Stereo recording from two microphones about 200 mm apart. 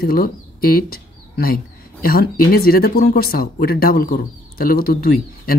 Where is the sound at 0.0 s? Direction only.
45° left (ahead or behind).